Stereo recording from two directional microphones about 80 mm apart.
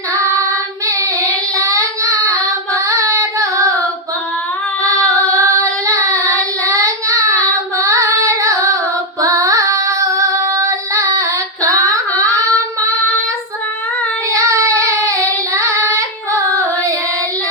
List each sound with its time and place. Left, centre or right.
0.9 s child singing: right
4.8 s child singing: right
9.2 s female singing: right
14.3 s child singing: right